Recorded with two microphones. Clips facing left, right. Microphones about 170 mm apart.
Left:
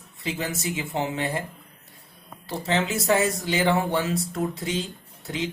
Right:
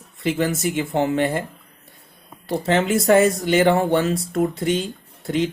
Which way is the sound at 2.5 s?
55° right (ahead or behind).